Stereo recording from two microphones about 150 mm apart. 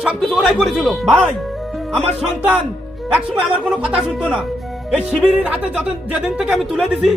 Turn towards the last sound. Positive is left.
turn(degrees=0)  # may be behind; listen again after turning